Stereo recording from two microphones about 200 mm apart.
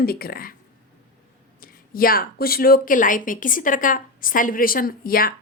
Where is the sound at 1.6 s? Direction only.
45° left (ahead or behind).